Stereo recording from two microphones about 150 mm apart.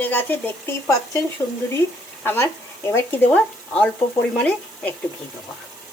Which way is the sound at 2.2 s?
15° left (ahead or behind).